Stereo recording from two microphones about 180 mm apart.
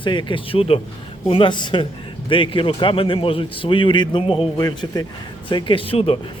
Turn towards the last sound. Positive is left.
turn(degrees=30)  # may be behind; listen again after turning